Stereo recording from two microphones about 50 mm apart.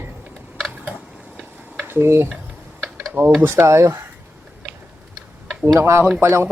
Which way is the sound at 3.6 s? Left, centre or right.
Right.